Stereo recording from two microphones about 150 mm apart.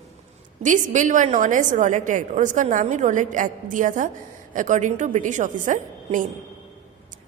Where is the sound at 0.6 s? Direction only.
60° right (ahead or behind).